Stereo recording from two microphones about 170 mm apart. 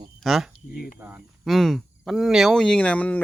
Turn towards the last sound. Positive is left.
turn(degrees=10)  # may be behind; listen again after turning